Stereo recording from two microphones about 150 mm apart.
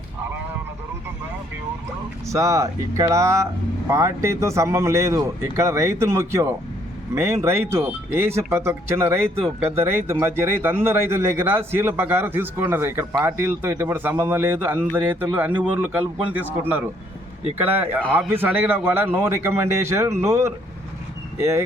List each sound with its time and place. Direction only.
2.3 s a man's voice: 20° right (ahead or behind)
18.0 s a man's voice: 5° left (ahead or behind)
18.3 s a man's voice: 15° right (ahead or behind)